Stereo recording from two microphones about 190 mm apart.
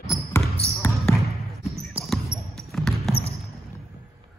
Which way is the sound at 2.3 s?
15° left (ahead or behind).